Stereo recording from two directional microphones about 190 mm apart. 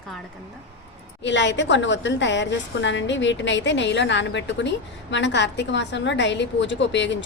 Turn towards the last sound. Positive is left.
turn(degrees=70)  # may be behind; listen again after turning